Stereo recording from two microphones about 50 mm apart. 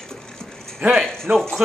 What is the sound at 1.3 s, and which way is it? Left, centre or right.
Speech, right.